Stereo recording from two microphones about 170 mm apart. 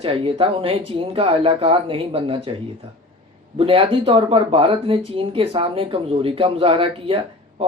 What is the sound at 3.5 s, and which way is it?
Speech, 30° right (ahead or behind).